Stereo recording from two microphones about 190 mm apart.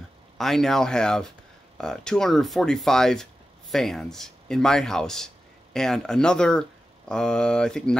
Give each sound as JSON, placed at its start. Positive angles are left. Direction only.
{"t": 0.4, "sound": "speech", "side_deg": 0}